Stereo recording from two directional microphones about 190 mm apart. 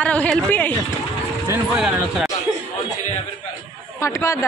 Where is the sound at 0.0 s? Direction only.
5° left (ahead or behind).